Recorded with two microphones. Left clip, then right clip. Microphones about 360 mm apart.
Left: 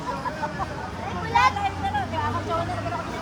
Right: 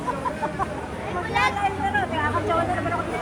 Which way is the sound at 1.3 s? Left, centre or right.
Left.